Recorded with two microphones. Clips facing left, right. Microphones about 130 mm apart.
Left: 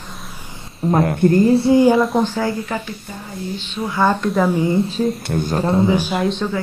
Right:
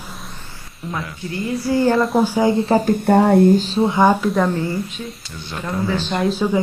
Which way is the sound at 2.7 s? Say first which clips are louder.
Right 10 dB; 45° right (ahead or behind).